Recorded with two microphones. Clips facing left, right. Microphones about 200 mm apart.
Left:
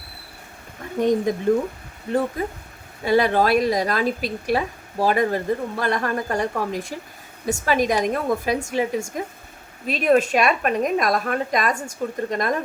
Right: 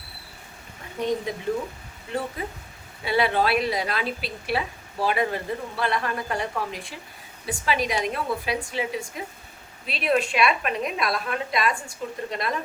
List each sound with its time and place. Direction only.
0.9 s speech: 45° left (ahead or behind)
2.4 s speech: 45° left (ahead or behind)